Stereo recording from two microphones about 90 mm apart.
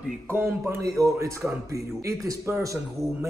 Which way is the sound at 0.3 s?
30° right (ahead or behind).